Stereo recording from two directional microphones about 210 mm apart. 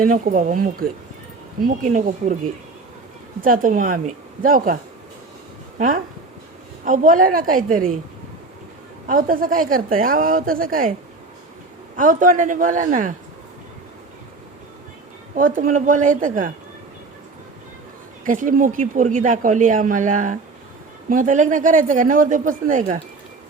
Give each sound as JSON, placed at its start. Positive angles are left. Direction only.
{"t": 0.0, "sound": "speech", "side_deg": -40}
{"t": 3.4, "sound": "speech", "side_deg": -40}
{"t": 6.8, "sound": "speech", "side_deg": -40}
{"t": 9.0, "sound": "speech", "side_deg": -40}
{"t": 11.9, "sound": "speech", "side_deg": -40}
{"t": 15.4, "sound": "speech", "side_deg": -40}
{"t": 18.3, "sound": "speech", "side_deg": -40}